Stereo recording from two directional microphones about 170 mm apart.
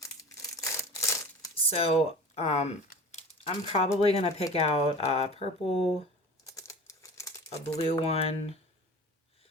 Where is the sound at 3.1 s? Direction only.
35° left (ahead or behind).